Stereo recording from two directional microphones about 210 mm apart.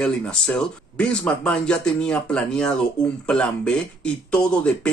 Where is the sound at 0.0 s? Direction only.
5° left (ahead or behind).